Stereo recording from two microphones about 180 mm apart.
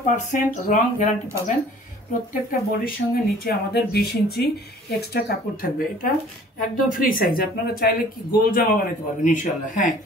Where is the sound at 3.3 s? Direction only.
60° left (ahead or behind).